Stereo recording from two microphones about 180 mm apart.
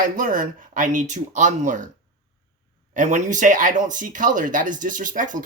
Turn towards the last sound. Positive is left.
turn(degrees=-45)  # may be behind; listen again after turning